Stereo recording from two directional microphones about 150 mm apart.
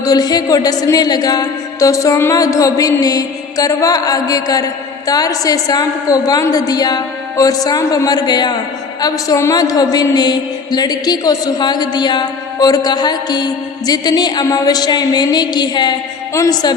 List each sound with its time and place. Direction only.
0.0 s music: 25° left (ahead or behind)